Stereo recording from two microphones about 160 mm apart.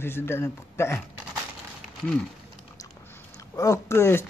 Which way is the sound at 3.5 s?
20° left (ahead or behind).